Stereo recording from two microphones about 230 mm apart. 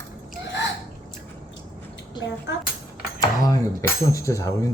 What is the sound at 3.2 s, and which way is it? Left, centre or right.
Speech, centre.